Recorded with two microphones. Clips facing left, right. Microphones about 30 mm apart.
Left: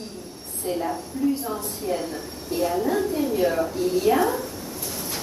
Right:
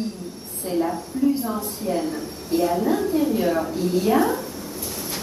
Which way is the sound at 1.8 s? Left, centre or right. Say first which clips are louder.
Right 2 dB; left.